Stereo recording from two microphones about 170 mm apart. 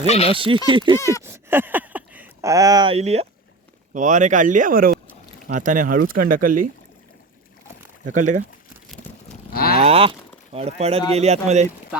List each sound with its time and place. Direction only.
0.0 s speech: 35° left (ahead or behind)
0.3 s speech: 30° right (ahead or behind)
0.9 s speech: 15° left (ahead or behind)
1.2 s a sound: 15° right (ahead or behind)
2.9 s speech: 40° right (ahead or behind); by 6.7 s 55° right (ahead or behind)
8.0 s speech: 45° right (ahead or behind)
9.5 s cattle: 65° left (ahead or behind)
9.8 s speech: 35° right (ahead or behind)